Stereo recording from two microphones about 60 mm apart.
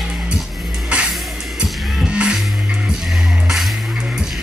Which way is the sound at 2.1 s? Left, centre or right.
Centre.